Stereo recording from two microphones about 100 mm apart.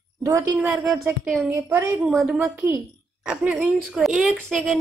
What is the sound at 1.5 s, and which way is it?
Speech, 30° right (ahead or behind).